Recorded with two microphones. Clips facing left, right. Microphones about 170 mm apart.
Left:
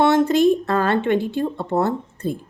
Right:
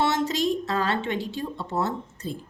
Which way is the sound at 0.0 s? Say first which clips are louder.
Left 9 dB; 55° left (ahead or behind).